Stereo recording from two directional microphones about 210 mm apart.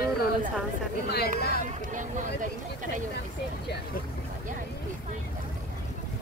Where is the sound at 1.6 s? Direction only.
35° right (ahead or behind).